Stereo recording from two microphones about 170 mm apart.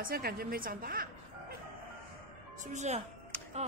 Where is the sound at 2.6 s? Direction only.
45° right (ahead or behind).